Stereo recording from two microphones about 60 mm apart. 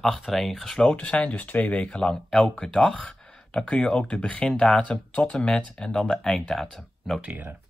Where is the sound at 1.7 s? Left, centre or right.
Centre.